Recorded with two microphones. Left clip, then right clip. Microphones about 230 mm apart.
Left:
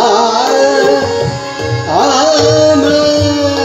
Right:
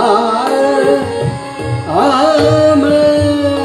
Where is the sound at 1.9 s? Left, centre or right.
Right.